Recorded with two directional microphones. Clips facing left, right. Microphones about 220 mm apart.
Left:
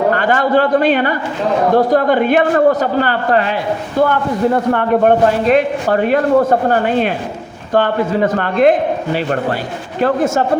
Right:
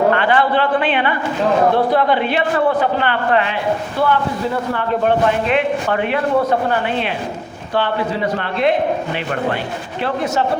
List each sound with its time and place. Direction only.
0.1 s a man's voice: 45° left (ahead or behind)
5.5 s a man's voice: 40° left (ahead or behind)